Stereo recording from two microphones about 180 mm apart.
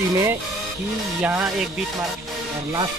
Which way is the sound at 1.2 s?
10° right (ahead or behind).